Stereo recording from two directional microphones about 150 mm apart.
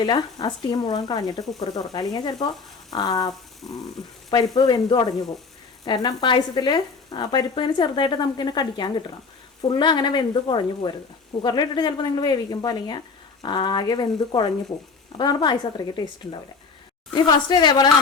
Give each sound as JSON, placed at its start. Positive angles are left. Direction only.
{"t": 0.0, "sound": "speech", "side_deg": 30}